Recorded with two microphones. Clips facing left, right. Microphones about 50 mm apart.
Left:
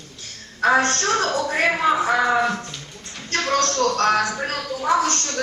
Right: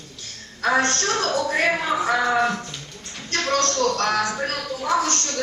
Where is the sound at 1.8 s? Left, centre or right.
Centre.